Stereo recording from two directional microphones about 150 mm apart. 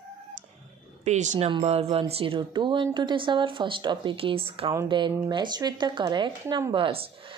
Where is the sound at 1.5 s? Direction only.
40° right (ahead or behind).